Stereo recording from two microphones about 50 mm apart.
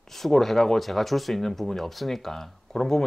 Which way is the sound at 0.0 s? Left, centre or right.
Centre.